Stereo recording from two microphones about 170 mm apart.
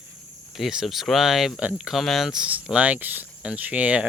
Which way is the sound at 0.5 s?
Centre (ahead or behind).